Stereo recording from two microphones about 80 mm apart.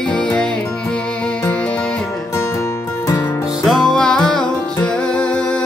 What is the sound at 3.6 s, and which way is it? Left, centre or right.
Music, centre.